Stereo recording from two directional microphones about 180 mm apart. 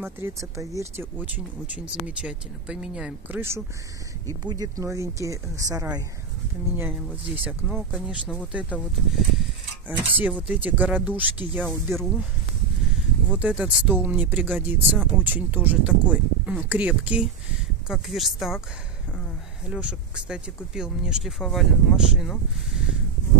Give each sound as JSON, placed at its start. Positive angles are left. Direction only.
{"t": 0.0, "sound": "speech", "side_deg": -15}
{"t": 7.4, "sound": "speech", "side_deg": -5}
{"t": 11.5, "sound": "speech", "side_deg": 5}
{"t": 13.3, "sound": "speech", "side_deg": -5}
{"t": 19.7, "sound": "speech", "side_deg": -5}